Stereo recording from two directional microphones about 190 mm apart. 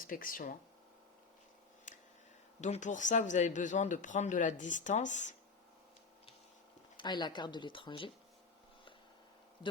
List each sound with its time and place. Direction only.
0.0 s speech: 45° left (ahead or behind)
2.6 s speech: 40° left (ahead or behind)
6.9 s speech: 25° left (ahead or behind)